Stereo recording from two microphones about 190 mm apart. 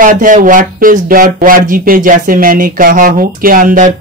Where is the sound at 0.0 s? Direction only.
45° right (ahead or behind).